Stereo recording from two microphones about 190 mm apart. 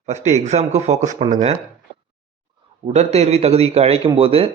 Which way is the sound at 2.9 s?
35° right (ahead or behind).